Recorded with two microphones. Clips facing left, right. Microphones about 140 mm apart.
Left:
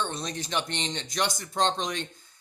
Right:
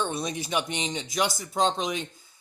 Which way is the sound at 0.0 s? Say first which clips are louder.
Right 3 dB; 10° right (ahead or behind).